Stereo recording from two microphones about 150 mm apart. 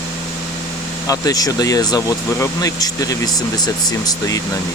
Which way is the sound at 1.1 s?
25° left (ahead or behind).